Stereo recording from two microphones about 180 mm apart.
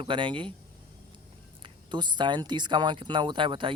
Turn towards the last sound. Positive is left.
turn(degrees=-30)  # may be behind; listen again after turning